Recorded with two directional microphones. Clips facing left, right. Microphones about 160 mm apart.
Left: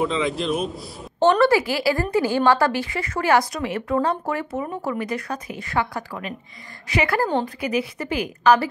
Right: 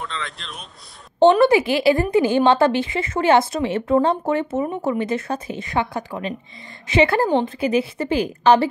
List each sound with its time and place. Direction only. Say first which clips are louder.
0.0 s a man's voice: left 10 dB; centre (ahead or behind)
1.2 s a woman's voice: right 3 dB; 20° right (ahead or behind)